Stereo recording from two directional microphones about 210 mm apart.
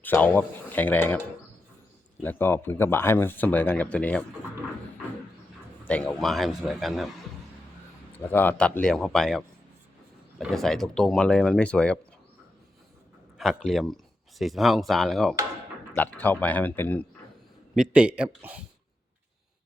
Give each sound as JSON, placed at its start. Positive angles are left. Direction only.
{"t": 0.0, "sound": "speech", "side_deg": 10}
{"t": 2.2, "sound": "speech", "side_deg": 10}
{"t": 5.9, "sound": "speech", "side_deg": 5}
{"t": 8.3, "sound": "speech", "side_deg": 10}
{"t": 13.4, "sound": "speech", "side_deg": 0}
{"t": 17.7, "sound": "speech", "side_deg": -5}